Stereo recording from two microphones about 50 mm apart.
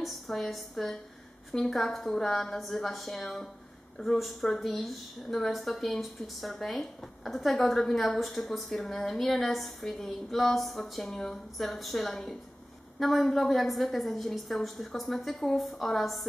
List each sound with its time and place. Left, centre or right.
0.0 s a woman's voice: centre